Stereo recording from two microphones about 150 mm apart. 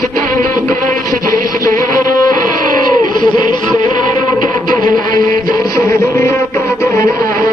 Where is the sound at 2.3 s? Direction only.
65° right (ahead or behind).